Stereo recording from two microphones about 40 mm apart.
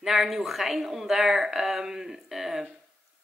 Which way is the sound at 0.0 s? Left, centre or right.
Centre.